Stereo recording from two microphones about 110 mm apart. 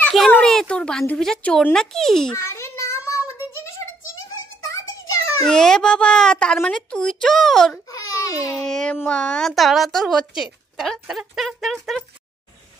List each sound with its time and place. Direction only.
0.4 s speech: 5° left (ahead or behind)
2.3 s child singing: 25° left (ahead or behind)
4.6 s music: 30° left (ahead or behind)
5.5 s a woman's voice: 5° left (ahead or behind)
7.9 s baby cry: 30° left (ahead or behind)
8.6 s a woman's voice: 5° left (ahead or behind)